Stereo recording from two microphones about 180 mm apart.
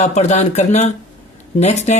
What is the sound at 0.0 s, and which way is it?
Speech, 40° left (ahead or behind).